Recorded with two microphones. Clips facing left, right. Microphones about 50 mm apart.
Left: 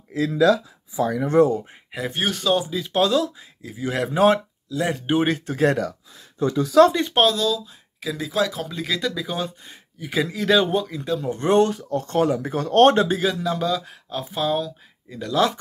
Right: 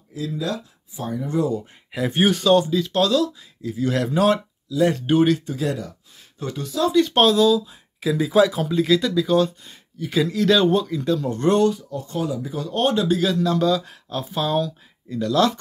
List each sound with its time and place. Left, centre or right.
0.1 s speech: left
1.4 s speech: left
1.9 s speech: centre
2.1 s speech: centre
2.4 s speech: centre; by 5.4 s left
5.5 s speech: left
6.9 s speech: left
7.2 s speech: centre
8.6 s speech: centre
11.7 s speech: left
13.2 s speech: centre